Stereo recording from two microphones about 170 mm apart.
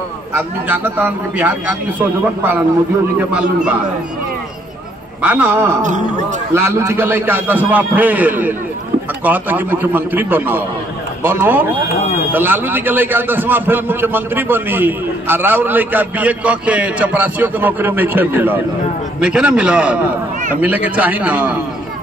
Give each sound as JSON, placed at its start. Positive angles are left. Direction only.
{"t": 0.3, "sound": "a man's voice", "side_deg": -10}
{"t": 5.2, "sound": "a man's voice", "side_deg": -10}
{"t": 5.8, "sound": "speech", "side_deg": -45}
{"t": 6.5, "sound": "a man's voice", "side_deg": -15}